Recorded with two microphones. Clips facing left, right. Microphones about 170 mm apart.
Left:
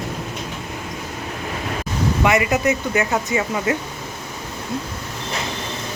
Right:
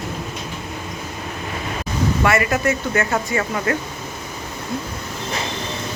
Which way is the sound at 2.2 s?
15° left (ahead or behind).